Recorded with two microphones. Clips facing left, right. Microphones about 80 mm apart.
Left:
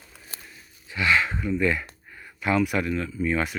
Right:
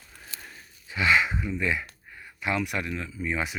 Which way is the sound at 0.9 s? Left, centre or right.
Right.